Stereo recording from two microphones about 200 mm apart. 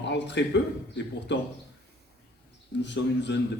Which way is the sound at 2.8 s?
60° left (ahead or behind).